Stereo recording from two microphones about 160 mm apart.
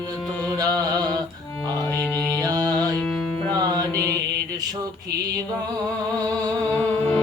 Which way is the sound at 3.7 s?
20° right (ahead or behind).